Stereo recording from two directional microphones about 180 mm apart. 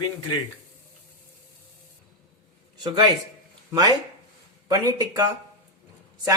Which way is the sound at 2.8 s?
25° right (ahead or behind).